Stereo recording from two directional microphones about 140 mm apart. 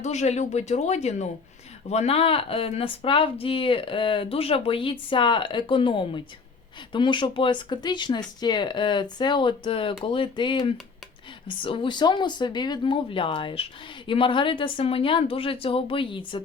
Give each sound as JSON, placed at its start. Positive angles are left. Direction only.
{"t": 0.0, "sound": "speech", "side_deg": 55}